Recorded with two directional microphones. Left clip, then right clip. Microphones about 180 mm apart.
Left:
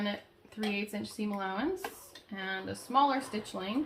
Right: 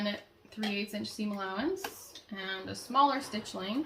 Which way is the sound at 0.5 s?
35° left (ahead or behind).